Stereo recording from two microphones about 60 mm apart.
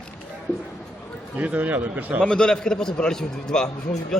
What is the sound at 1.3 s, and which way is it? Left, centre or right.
Speech, right.